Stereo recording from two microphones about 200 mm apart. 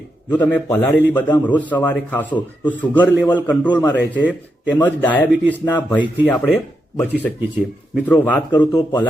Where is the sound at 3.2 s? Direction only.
20° left (ahead or behind).